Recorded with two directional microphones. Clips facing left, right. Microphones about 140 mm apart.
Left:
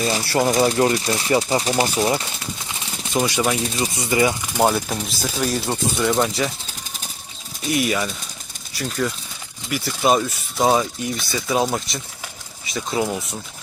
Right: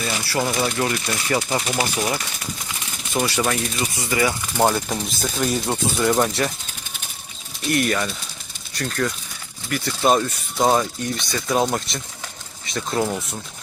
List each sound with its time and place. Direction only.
0.0 s speech: 30° left (ahead or behind)
2.6 s a sound: 25° left (ahead or behind)
3.2 s speech: 15° left (ahead or behind)
3.6 s speech: 30° left (ahead or behind); by 6.5 s centre (ahead or behind)
7.7 s speech: 5° left (ahead or behind)